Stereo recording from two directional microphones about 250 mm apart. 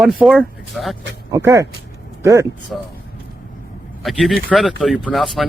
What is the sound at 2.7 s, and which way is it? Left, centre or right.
Speech, centre.